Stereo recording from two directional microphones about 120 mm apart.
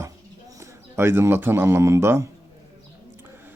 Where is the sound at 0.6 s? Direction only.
20° right (ahead or behind).